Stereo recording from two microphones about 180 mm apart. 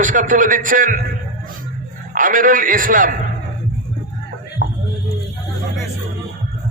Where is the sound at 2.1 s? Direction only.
50° right (ahead or behind).